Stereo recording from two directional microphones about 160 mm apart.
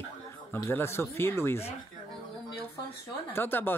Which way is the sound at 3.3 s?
15° left (ahead or behind).